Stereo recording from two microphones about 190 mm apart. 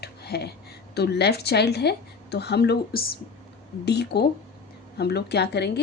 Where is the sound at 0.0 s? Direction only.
55° left (ahead or behind).